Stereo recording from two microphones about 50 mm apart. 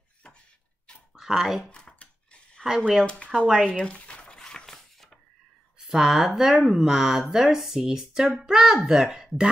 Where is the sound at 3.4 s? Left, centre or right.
Centre.